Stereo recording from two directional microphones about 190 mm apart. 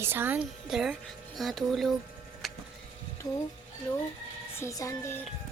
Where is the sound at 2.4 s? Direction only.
Centre (ahead or behind).